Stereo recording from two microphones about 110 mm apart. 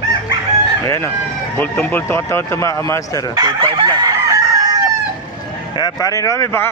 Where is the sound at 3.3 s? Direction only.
35° right (ahead or behind).